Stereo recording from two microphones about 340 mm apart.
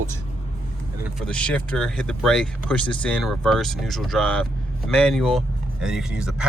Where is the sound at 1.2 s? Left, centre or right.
Centre.